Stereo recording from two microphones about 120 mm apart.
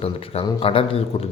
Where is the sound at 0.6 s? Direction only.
50° left (ahead or behind).